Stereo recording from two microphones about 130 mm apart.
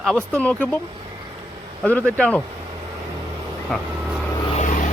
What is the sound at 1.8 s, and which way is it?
Speech, 10° left (ahead or behind).